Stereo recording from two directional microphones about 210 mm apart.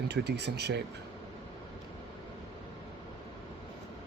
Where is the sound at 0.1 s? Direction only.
55° right (ahead or behind).